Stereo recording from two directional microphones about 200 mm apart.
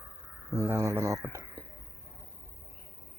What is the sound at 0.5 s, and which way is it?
Speech, 15° right (ahead or behind).